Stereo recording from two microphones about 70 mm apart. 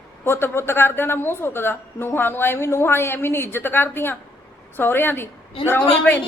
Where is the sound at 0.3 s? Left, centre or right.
Left.